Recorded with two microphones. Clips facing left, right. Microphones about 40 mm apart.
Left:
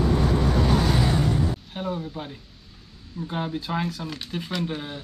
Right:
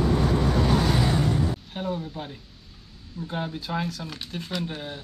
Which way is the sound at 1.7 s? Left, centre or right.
Centre.